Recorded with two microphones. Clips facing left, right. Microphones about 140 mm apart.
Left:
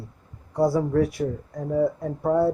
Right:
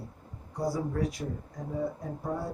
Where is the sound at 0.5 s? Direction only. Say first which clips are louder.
Left 10 dB; 65° left (ahead or behind).